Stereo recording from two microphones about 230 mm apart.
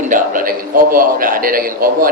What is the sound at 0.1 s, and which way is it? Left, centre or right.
A man's voice, right.